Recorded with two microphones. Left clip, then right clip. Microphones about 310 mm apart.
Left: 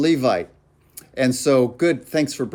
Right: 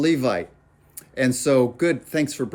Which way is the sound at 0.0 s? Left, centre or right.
Centre.